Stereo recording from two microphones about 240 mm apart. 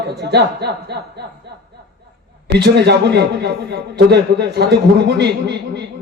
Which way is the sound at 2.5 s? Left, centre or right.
Right.